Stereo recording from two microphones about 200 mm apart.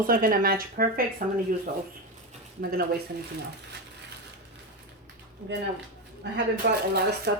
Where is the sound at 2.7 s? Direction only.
50° right (ahead or behind).